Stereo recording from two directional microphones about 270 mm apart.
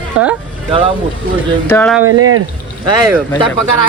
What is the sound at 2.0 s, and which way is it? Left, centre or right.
Speech, right.